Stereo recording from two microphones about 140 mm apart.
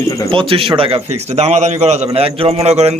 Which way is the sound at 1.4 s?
55° right (ahead or behind).